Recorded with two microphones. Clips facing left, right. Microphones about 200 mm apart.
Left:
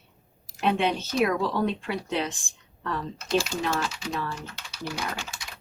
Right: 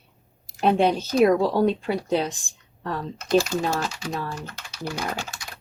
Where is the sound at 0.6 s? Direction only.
40° right (ahead or behind).